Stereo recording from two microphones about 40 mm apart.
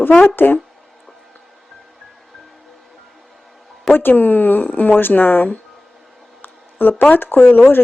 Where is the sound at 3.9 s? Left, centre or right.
Left.